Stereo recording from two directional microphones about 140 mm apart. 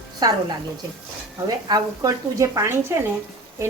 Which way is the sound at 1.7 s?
25° right (ahead or behind).